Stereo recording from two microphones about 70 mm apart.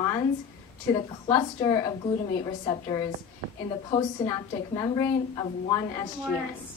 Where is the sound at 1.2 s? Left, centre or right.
Left.